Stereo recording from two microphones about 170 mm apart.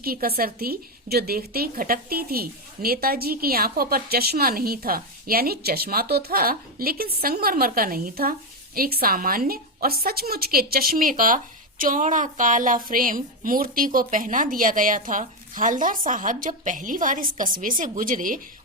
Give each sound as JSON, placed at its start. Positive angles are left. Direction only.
{"t": 0.0, "sound": "a woman's voice", "side_deg": -60}